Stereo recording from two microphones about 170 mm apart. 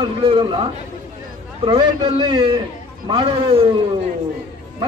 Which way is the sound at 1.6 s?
30° right (ahead or behind).